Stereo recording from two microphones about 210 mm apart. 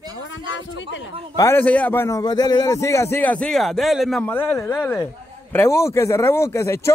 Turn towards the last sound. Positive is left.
turn(degrees=15)  # may be behind; listen again after turning